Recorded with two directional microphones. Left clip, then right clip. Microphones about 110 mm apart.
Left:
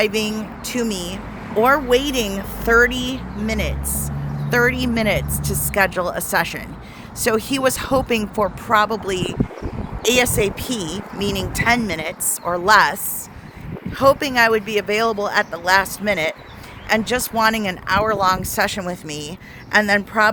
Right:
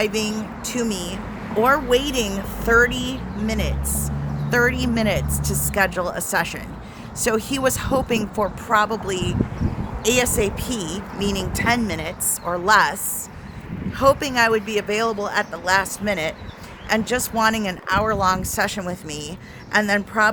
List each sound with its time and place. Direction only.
0.0 s speech: 40° left (ahead or behind)